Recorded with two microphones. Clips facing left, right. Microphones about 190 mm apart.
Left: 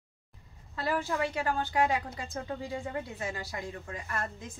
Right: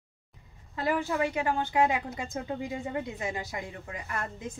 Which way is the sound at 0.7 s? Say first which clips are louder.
Right 3 dB; 15° right (ahead or behind).